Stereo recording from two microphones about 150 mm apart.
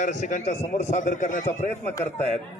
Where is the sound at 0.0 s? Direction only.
55° left (ahead or behind).